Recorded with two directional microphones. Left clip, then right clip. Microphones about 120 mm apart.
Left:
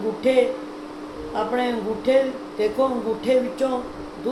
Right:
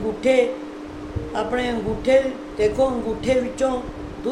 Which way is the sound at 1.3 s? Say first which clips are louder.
Even; 15° right (ahead or behind).